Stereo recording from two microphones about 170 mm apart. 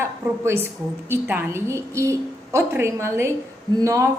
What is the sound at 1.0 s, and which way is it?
A woman's voice, 10° right (ahead or behind).